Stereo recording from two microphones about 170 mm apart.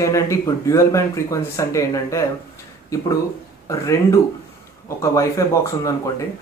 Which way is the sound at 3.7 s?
20° left (ahead or behind).